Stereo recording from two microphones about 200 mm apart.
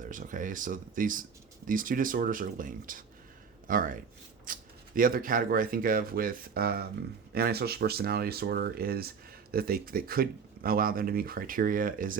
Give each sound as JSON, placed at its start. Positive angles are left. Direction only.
{"t": 0.0, "sound": "speech", "side_deg": -40}